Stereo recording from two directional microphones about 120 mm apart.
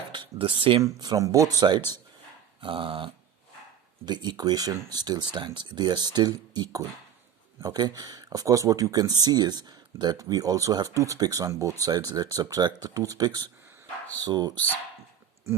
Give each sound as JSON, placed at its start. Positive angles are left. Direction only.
{"t": 0.1, "sound": "speech", "side_deg": -45}
{"t": 0.9, "sound": "speech", "side_deg": -35}
{"t": 2.6, "sound": "dog", "side_deg": -45}
{"t": 4.0, "sound": "speech", "side_deg": -35}